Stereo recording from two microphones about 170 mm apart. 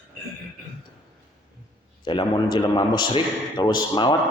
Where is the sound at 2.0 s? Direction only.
30° left (ahead or behind).